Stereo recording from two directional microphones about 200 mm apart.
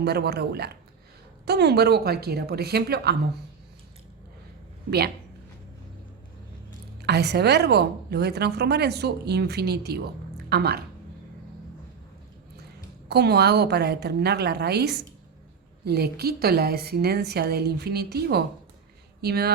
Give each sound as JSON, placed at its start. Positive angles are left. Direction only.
{"t": 0.0, "sound": "a woman's voice", "side_deg": -55}
{"t": 4.9, "sound": "a woman's voice", "side_deg": -55}
{"t": 7.0, "sound": "a woman's voice", "side_deg": -55}
{"t": 13.1, "sound": "a woman's voice", "side_deg": -55}